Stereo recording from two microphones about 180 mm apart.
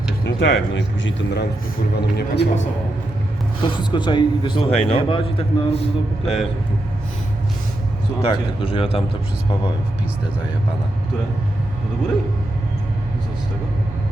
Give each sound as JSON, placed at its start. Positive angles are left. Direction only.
{"t": 0.3, "sound": "speech", "side_deg": 90}
{"t": 2.0, "sound": "speech", "side_deg": 65}
{"t": 3.6, "sound": "a man's voice", "side_deg": 25}
{"t": 6.2, "sound": "speech", "side_deg": 0}
{"t": 8.2, "sound": "a man's voice", "side_deg": 30}